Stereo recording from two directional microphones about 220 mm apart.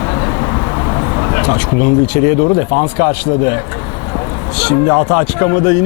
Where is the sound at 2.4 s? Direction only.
35° left (ahead or behind).